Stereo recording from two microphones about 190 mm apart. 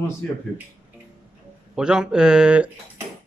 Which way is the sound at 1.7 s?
5° right (ahead or behind).